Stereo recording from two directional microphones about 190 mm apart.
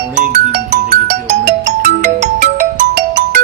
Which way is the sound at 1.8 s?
45° right (ahead or behind).